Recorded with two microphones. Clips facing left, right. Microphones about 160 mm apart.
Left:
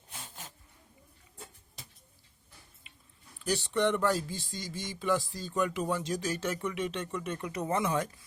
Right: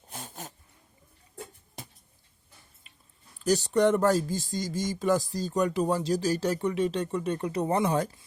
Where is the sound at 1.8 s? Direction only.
55° right (ahead or behind).